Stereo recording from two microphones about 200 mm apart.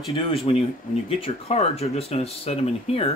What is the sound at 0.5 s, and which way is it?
Speech, 30° left (ahead or behind).